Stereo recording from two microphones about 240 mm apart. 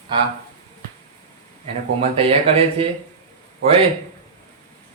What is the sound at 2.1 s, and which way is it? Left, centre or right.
Speech, right.